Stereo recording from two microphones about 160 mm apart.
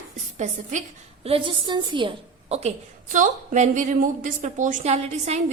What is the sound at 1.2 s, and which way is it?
A woman's voice, 35° right (ahead or behind).